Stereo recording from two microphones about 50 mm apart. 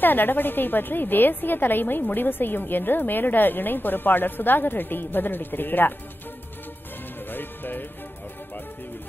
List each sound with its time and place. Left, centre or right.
0.0 s a woman's voice: left
7.2 s music: left